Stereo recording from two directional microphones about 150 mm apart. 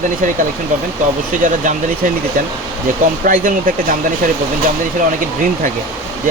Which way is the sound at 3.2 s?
65° right (ahead or behind).